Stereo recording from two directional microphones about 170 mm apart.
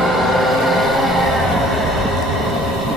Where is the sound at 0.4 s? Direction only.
Centre (ahead or behind).